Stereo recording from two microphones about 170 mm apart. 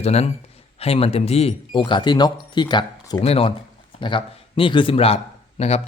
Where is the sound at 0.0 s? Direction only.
40° left (ahead or behind).